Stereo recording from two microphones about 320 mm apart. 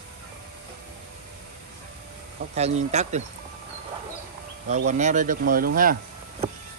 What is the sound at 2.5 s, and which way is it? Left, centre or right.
Speech, centre.